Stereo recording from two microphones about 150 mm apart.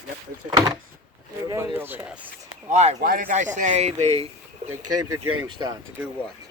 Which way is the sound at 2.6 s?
50° right (ahead or behind).